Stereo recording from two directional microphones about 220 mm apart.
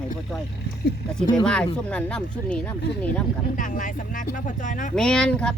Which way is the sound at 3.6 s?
35° left (ahead or behind).